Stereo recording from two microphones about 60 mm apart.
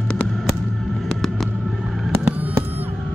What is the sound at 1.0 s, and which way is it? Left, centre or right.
Fireworks, centre.